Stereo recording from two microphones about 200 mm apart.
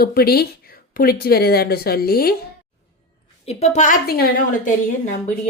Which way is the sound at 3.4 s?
35° left (ahead or behind).